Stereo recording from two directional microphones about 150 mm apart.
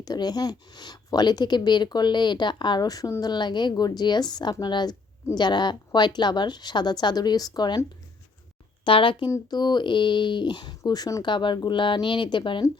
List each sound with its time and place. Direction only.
0.0 s speech: 25° left (ahead or behind)